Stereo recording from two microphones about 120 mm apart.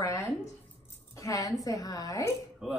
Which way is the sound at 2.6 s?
Centre (ahead or behind).